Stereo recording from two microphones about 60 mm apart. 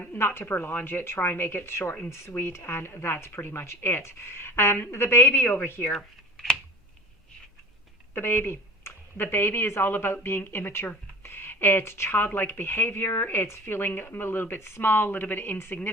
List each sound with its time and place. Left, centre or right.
0.2 s speech: left
5.4 s speech: left
5.9 s speech: centre
8.1 s speech: left